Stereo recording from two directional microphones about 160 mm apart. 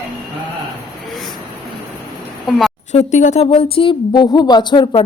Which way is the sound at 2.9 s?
45° left (ahead or behind).